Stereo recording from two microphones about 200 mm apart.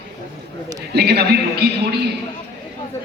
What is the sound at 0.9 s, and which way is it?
A man's voice, 55° right (ahead or behind).